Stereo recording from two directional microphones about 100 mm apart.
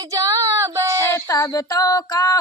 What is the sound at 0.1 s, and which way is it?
Female singing, 35° right (ahead or behind).